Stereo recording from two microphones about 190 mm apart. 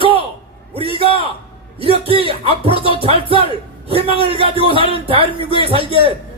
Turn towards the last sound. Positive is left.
turn(degrees=-30)  # may be behind; listen again after turning